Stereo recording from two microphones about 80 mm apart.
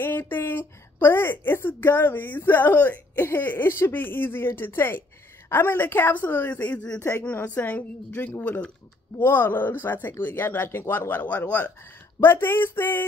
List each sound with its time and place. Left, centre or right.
0.0 s a woman's voice: left
7.0 s speech: left
7.2 s a woman's voice: left